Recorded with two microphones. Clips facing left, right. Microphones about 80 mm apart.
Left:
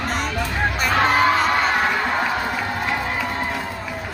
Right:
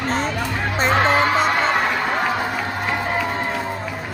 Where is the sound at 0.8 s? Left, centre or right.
Right.